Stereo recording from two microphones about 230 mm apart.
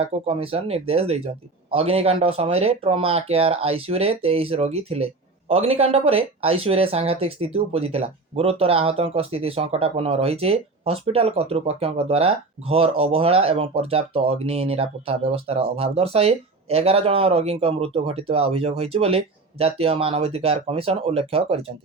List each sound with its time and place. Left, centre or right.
0.0 s speech: right